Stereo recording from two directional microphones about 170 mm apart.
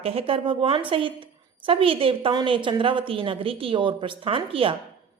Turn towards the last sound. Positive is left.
turn(degrees=-30)  # may be behind; listen again after turning